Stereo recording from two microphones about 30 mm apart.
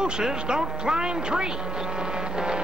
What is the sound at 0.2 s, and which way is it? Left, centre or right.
Speech, right.